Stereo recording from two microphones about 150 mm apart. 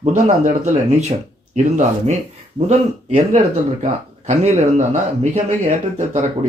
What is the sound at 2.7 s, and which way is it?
Speech, 50° right (ahead or behind).